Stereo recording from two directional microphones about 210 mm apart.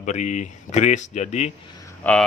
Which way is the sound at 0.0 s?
35° left (ahead or behind).